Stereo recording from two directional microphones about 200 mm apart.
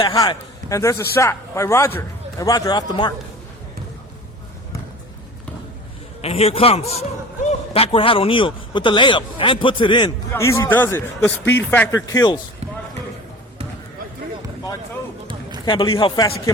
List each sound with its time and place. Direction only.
0.0 s a man's voice: 20° left (ahead or behind)
6.2 s a man's voice: 30° left (ahead or behind)
15.6 s a man's voice: 25° left (ahead or behind)